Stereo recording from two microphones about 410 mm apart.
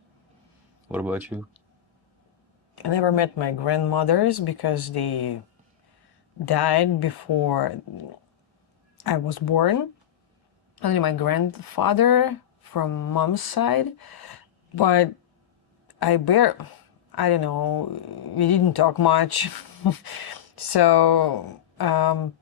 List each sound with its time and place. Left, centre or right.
0.9 s speech: centre
2.7 s speech: left
6.4 s speech: left
9.0 s speech: left
14.8 s speech: left
16.0 s speech: left